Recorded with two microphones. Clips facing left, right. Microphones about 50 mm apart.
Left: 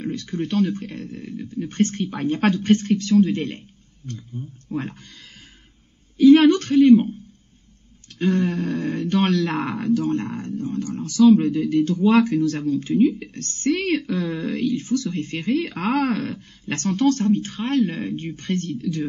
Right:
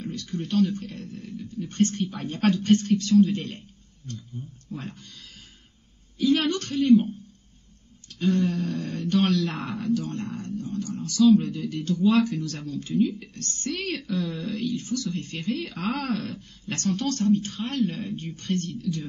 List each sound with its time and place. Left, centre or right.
0.0 s speech: left
6.1 s a sound: left
8.2 s speech: left